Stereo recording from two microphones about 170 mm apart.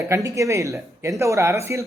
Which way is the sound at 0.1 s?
20° right (ahead or behind).